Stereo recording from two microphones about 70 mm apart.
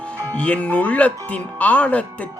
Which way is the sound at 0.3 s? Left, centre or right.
Centre.